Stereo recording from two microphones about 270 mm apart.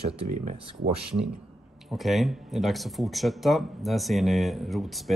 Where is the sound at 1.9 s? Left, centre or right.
Centre.